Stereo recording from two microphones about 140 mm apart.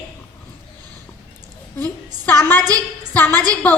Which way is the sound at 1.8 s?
15° left (ahead or behind).